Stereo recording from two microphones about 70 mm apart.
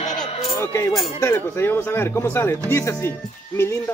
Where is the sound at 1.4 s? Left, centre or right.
Left.